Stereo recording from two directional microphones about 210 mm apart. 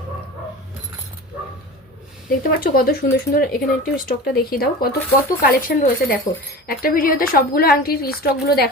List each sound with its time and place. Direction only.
2.5 s speech: 45° left (ahead or behind)